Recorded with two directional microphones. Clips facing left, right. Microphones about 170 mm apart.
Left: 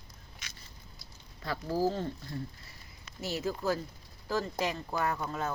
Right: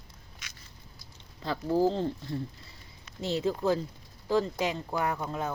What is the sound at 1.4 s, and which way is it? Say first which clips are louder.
Speech: right 4 dB; 20° right (ahead or behind).